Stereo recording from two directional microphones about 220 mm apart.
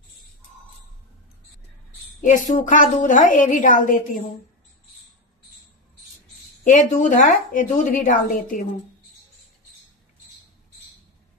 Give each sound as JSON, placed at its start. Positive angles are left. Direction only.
{"t": 2.2, "sound": "a woman's voice", "side_deg": 35}
{"t": 6.6, "sound": "a woman's voice", "side_deg": 35}